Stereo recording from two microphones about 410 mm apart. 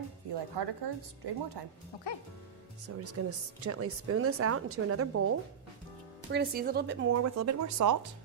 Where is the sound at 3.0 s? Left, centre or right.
Right.